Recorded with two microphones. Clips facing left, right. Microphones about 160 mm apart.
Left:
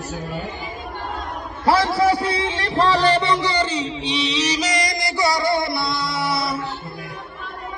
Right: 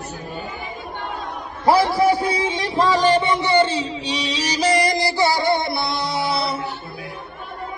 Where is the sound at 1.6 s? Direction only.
15° right (ahead or behind).